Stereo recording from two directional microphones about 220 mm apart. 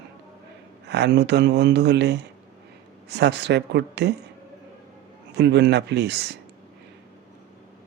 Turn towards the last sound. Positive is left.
turn(degrees=-50)  # may be behind; listen again after turning